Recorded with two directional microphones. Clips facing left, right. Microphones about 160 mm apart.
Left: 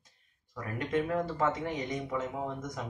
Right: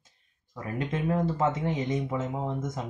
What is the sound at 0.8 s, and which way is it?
Speech, 25° right (ahead or behind).